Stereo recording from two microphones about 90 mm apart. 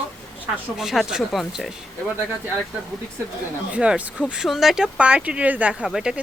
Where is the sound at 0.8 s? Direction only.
5° right (ahead or behind).